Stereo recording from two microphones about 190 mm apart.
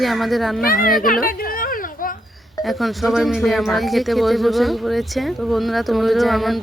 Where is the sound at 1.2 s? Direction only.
50° left (ahead or behind).